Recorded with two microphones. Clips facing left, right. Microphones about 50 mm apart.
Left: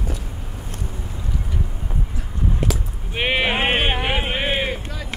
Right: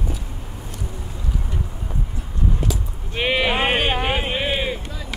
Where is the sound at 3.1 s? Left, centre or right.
Centre.